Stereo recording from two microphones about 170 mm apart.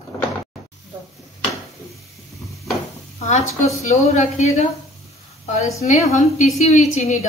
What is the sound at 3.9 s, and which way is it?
Speech, 40° left (ahead or behind).